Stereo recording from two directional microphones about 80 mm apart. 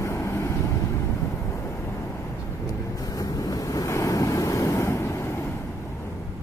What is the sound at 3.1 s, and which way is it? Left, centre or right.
Waves, left.